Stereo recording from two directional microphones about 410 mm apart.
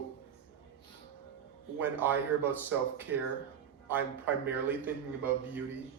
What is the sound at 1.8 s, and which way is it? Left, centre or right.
Speech, centre.